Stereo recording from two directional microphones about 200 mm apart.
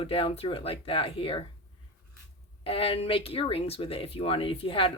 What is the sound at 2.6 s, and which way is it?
Speech, 25° left (ahead or behind).